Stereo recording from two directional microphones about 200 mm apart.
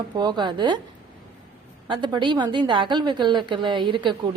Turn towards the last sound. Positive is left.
turn(degrees=-25)  # may be behind; listen again after turning